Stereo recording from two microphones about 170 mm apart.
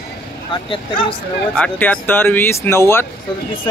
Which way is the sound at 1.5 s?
10° left (ahead or behind).